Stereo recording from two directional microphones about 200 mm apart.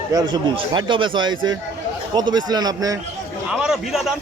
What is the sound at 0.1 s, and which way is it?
Speech, 20° right (ahead or behind).